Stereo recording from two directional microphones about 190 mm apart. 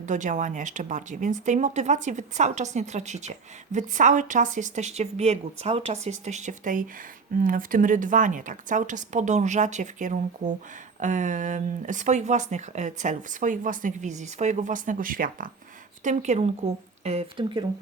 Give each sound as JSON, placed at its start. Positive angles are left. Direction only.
{"t": 0.0, "sound": "speech", "side_deg": -40}